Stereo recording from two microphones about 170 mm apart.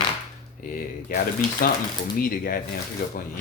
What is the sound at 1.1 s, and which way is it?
Speech, 60° left (ahead or behind).